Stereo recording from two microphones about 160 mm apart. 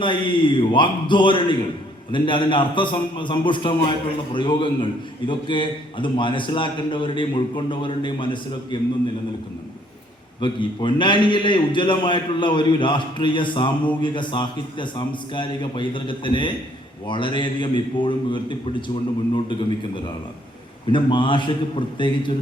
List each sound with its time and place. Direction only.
0.0 s a man's voice: 30° left (ahead or behind)
10.4 s a man's voice: 30° left (ahead or behind)
20.9 s a man's voice: 30° left (ahead or behind)